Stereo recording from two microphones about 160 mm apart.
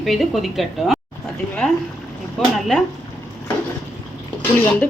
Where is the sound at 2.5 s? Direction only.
Centre (ahead or behind).